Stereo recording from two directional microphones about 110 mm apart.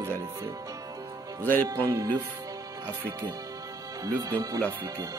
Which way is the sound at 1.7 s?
30° right (ahead or behind).